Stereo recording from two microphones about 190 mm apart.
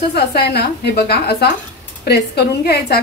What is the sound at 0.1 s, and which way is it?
A woman's voice, 55° left (ahead or behind).